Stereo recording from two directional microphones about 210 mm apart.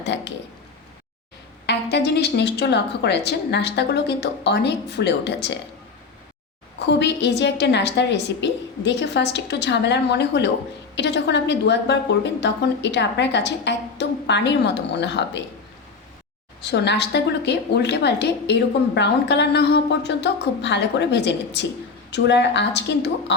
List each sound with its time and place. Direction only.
1.6 s a woman's voice: 55° left (ahead or behind)
6.7 s a woman's voice: 55° left (ahead or behind)
16.6 s a woman's voice: 55° left (ahead or behind)